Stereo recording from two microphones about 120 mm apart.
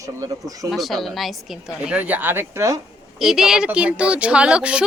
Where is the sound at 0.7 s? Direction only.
Centre (ahead or behind); by 2.7 s 20° right (ahead or behind).